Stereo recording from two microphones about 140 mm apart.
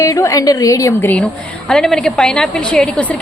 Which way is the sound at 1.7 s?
5° left (ahead or behind).